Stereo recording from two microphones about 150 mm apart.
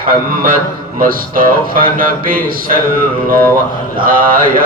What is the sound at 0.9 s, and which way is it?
Speech, 70° right (ahead or behind).